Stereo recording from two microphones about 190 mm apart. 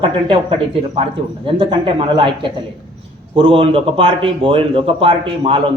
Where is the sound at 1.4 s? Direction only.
30° right (ahead or behind).